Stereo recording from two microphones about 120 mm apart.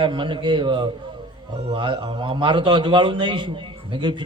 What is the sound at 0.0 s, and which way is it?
A man's voice, 45° right (ahead or behind).